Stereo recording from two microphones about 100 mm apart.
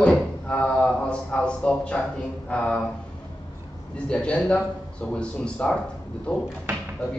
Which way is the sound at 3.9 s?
10° left (ahead or behind).